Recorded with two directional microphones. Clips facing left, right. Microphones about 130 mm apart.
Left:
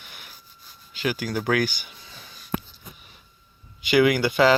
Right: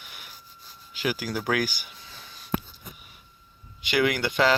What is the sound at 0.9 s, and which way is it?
Speech, 10° right (ahead or behind).